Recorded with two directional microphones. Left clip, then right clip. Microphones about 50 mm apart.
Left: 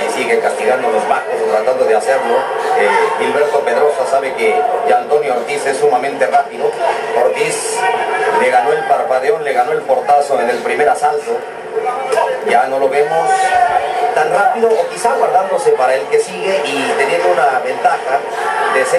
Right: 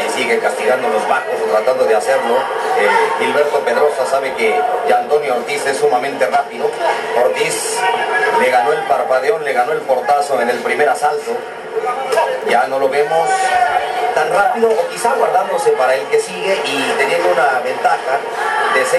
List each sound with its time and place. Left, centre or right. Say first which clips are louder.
0.3 s a man's voice: left 2 dB; right
12.4 s a man's voice: left 2 dB; right